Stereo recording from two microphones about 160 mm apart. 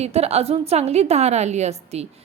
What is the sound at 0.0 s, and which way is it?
A woman's voice, 40° right (ahead or behind).